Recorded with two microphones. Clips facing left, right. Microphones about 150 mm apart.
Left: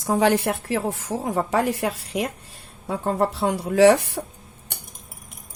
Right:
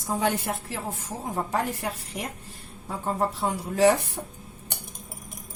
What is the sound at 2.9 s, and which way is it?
Speech, 75° left (ahead or behind).